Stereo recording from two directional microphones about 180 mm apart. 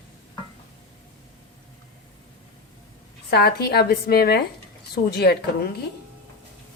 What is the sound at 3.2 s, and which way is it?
Speech, 60° left (ahead or behind).